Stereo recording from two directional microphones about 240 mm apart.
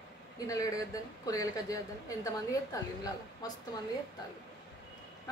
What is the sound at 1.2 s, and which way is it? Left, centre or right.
A woman's voice, centre.